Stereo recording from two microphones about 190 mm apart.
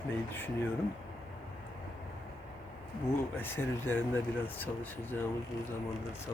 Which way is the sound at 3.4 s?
10° left (ahead or behind).